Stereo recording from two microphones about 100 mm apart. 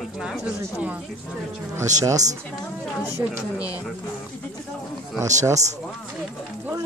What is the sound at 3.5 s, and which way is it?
Speech, 35° left (ahead or behind).